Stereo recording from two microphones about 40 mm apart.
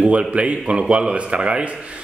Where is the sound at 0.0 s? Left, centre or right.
Right.